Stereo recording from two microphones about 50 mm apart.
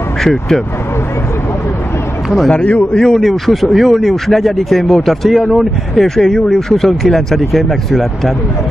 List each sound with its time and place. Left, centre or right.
0.2 s speech: centre
2.2 s speech: centre
2.5 s a man's voice: left
3.0 s speech: centre